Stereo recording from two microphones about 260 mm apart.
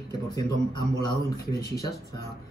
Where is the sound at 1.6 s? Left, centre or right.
Centre.